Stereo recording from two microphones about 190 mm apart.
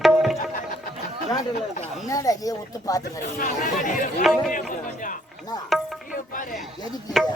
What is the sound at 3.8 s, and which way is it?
Speech, 45° left (ahead or behind).